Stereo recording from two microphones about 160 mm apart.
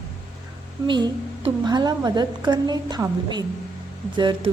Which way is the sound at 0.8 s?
25° right (ahead or behind).